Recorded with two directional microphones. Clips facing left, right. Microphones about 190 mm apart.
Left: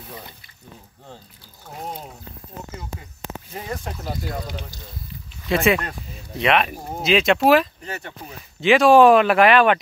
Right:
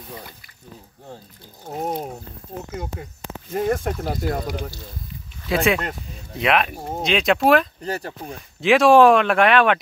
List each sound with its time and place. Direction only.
1.8 s a sound: 45° right (ahead or behind)
3.5 s speech: 50° right (ahead or behind)
5.5 s speech: centre (ahead or behind)
7.8 s speech: 35° right (ahead or behind)
8.5 s speech: centre (ahead or behind)